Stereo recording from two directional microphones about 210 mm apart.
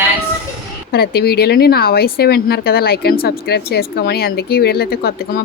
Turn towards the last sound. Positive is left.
turn(degrees=45)  # may be behind; listen again after turning